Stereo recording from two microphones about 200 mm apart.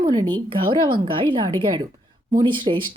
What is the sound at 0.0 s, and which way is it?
Speech, 20° right (ahead or behind).